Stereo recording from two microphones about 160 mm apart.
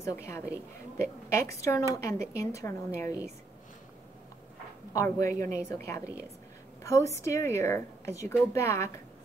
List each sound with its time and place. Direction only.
0.0 s a woman's voice: 15° left (ahead or behind)
4.9 s a woman's voice: 20° left (ahead or behind)